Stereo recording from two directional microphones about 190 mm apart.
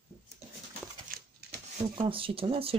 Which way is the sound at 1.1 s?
50° right (ahead or behind).